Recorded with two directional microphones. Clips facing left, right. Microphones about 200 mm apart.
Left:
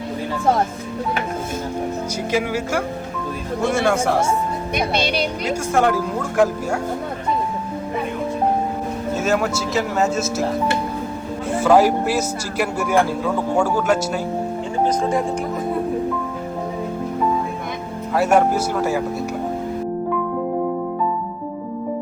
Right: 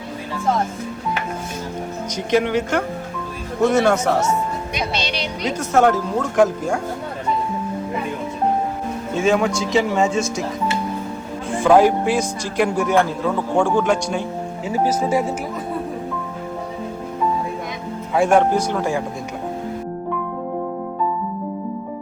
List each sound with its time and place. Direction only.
2.3 s speech: 5° left (ahead or behind)
4.7 s speech: 55° left (ahead or behind)
5.4 s speech: 5° left (ahead or behind)
9.1 s speech: 5° left (ahead or behind)
11.6 s speech: 5° left (ahead or behind)
14.7 s speech: 5° right (ahead or behind)
18.1 s speech: 5° left (ahead or behind)